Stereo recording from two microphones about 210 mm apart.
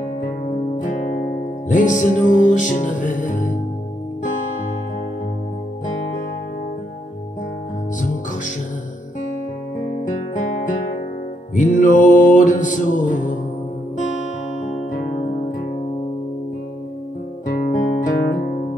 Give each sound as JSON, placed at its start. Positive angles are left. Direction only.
{"t": 0.7, "sound": "music", "side_deg": 35}
{"t": 10.0, "sound": "music", "side_deg": 35}
{"t": 17.5, "sound": "guitar", "side_deg": 40}